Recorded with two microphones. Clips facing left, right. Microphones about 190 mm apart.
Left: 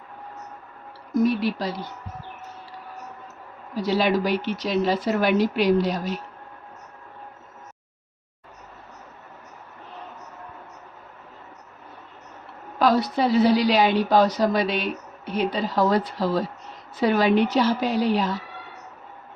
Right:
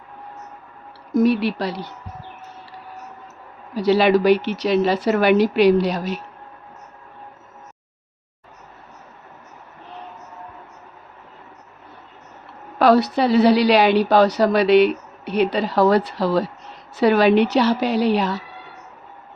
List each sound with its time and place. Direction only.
1.2 s a woman's voice: 70° right (ahead or behind)
3.8 s a woman's voice: 70° right (ahead or behind)
12.8 s a woman's voice: 70° right (ahead or behind)